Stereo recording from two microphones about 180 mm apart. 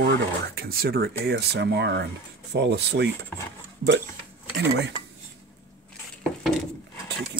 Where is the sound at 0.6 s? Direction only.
55° right (ahead or behind); by 3.1 s 75° right (ahead or behind).